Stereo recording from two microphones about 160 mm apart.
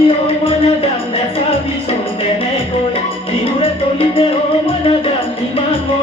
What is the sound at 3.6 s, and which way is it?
Music, 35° left (ahead or behind).